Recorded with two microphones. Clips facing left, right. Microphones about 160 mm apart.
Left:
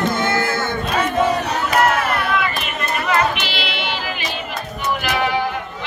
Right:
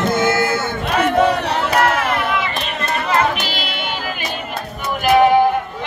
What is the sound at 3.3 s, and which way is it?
Singing, 45° right (ahead or behind).